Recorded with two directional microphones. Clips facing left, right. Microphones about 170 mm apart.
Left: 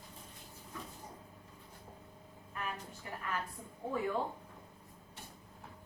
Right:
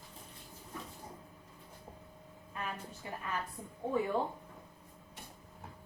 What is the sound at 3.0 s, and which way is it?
Speech, 20° right (ahead or behind).